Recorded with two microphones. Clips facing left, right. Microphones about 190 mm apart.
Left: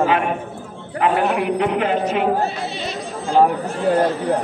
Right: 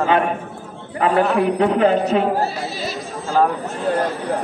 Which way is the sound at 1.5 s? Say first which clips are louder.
Right 3 dB; 35° right (ahead or behind).